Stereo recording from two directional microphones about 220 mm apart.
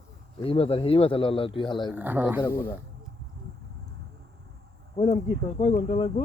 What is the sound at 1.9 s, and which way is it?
Speech, 5° right (ahead or behind).